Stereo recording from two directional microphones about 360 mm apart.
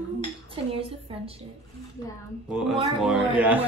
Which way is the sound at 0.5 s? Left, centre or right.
Centre.